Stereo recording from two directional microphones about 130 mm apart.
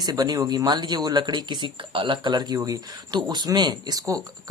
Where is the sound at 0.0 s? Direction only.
30° right (ahead or behind).